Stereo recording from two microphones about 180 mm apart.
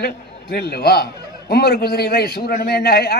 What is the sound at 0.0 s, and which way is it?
A man's voice, 65° left (ahead or behind).